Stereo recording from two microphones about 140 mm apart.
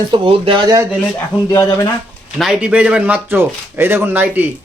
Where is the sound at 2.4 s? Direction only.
5° right (ahead or behind).